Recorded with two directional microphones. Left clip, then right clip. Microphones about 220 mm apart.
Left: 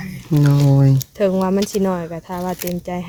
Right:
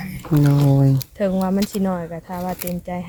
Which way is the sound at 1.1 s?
55° left (ahead or behind).